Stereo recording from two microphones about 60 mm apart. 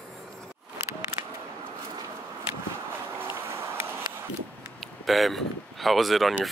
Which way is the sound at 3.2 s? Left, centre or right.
Right.